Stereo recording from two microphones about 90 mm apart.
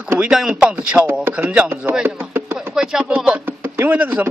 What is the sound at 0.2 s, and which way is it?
Speech, 5° right (ahead or behind).